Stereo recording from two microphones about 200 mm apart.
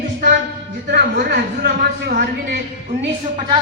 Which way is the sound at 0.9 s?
45° right (ahead or behind).